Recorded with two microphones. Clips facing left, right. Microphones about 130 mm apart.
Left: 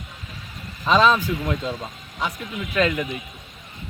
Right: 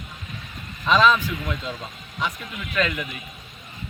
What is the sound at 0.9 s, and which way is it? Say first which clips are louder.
Speech: left 1 dB; 35° left (ahead or behind).